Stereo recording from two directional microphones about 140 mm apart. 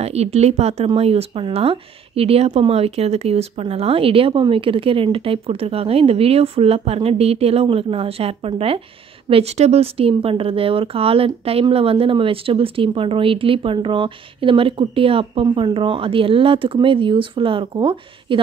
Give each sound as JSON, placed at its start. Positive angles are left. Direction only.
{"t": 0.0, "sound": "speech", "side_deg": -50}